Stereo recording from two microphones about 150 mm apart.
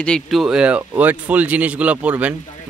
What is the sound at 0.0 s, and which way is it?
Speech, centre (ahead or behind).